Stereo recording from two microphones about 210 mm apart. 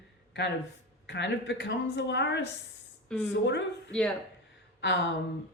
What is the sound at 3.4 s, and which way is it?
Speech, 60° left (ahead or behind).